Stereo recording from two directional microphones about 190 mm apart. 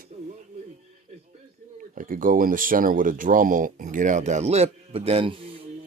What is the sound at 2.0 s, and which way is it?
Speech, 45° right (ahead or behind).